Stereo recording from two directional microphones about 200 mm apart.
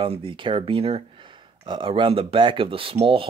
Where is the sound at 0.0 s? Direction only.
25° right (ahead or behind).